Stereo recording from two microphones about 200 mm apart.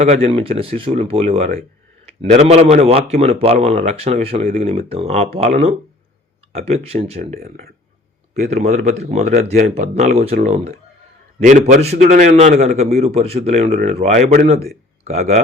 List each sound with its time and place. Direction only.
0.0 s a man's voice: 30° right (ahead or behind)
7.3 s speech: 50° right (ahead or behind)
8.3 s a man's voice: 35° right (ahead or behind)